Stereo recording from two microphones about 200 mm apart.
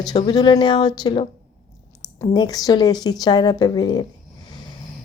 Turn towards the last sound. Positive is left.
turn(degrees=20)  # may be behind; listen again after turning